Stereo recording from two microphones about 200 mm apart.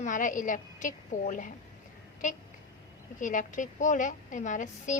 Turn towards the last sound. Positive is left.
turn(degrees=40)  # may be behind; listen again after turning